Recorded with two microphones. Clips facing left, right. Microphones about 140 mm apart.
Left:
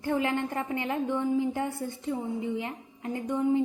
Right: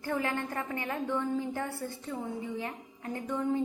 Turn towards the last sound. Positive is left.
turn(degrees=15)  # may be behind; listen again after turning